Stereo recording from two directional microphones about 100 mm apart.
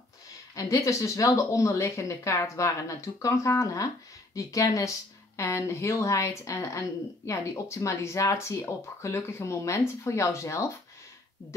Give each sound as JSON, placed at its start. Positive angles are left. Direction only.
{"t": 0.6, "sound": "speech", "side_deg": 35}